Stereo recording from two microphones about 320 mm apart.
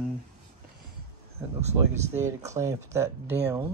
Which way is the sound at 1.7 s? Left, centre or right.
Centre.